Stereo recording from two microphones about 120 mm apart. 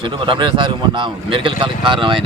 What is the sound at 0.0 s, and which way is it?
A man's voice, 45° right (ahead or behind).